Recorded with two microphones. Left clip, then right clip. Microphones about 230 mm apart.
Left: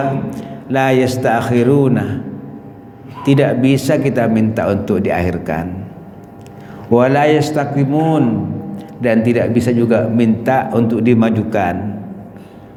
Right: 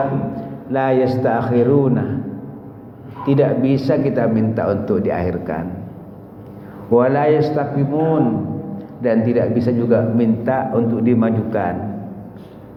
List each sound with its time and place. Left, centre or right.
0.3 s a man's voice: left
3.2 s a man's voice: left
6.9 s a man's voice: left